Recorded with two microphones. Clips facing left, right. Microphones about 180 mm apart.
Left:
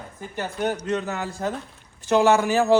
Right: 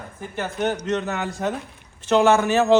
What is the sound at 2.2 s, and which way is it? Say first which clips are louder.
Speech: right 1 dB; 15° left (ahead or behind).